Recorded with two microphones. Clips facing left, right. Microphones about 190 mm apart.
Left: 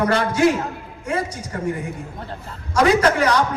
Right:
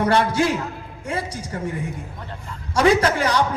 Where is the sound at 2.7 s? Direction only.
30° right (ahead or behind).